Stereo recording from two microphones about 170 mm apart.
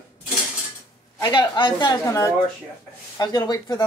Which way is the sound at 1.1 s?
25° left (ahead or behind).